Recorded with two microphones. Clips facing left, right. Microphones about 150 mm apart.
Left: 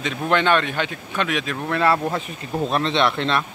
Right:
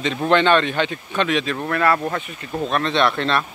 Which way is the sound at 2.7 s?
25° left (ahead or behind).